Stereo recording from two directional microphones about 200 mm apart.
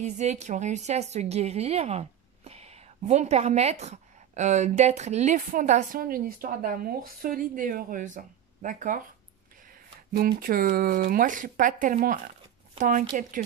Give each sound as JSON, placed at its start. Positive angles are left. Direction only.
{"t": 0.0, "sound": "a woman's voice", "side_deg": -35}
{"t": 10.1, "sound": "a woman's voice", "side_deg": -45}